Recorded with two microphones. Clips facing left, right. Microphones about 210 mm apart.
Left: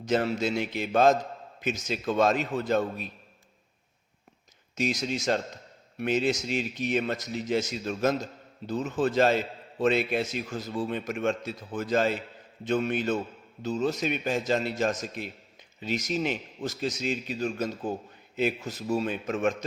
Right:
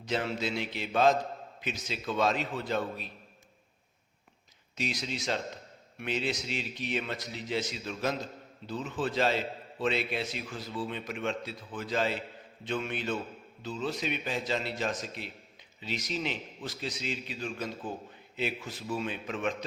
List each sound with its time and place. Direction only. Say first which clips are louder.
0.0 s a man's voice: left 6 dB; 45° left (ahead or behind)
4.7 s a man's voice: left 6 dB; 45° left (ahead or behind)